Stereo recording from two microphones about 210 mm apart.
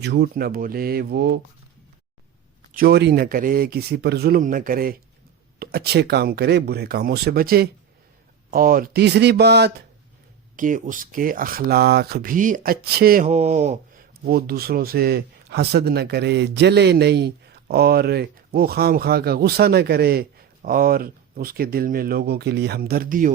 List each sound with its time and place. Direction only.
0.0 s speech: 50° right (ahead or behind)
2.7 s speech: 50° right (ahead or behind)
10.6 s speech: 40° right (ahead or behind)
13.2 s speech: 30° right (ahead or behind)
14.3 s speech: 45° right (ahead or behind)